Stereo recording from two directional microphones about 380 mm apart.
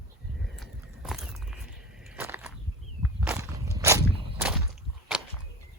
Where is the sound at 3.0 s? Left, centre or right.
Centre.